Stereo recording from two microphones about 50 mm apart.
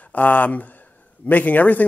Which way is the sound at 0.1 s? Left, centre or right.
Left.